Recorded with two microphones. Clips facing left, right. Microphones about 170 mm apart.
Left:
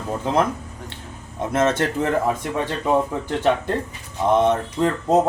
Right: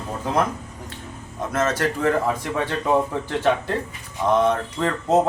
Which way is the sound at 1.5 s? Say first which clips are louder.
Left 3 dB; 25° left (ahead or behind).